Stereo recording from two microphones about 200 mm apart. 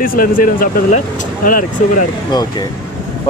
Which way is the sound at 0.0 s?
45° left (ahead or behind).